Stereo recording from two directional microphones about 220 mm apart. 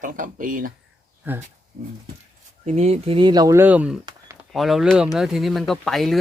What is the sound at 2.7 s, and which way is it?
Speech, 30° right (ahead or behind).